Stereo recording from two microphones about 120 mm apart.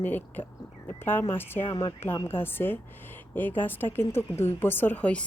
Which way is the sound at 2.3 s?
20° left (ahead or behind).